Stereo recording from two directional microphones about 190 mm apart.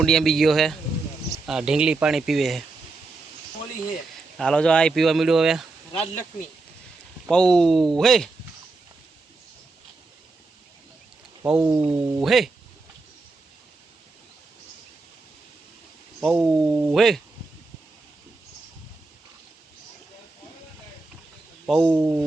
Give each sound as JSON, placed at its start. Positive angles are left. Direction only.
{"t": 0.0, "sound": "speech", "side_deg": 0}
{"t": 4.4, "sound": "speech", "side_deg": 5}
{"t": 5.9, "sound": "speech", "side_deg": 30}
{"t": 7.3, "sound": "speech", "side_deg": 5}
{"t": 11.4, "sound": "speech", "side_deg": -5}
{"t": 16.2, "sound": "speech", "side_deg": 0}
{"t": 21.7, "sound": "speech", "side_deg": 0}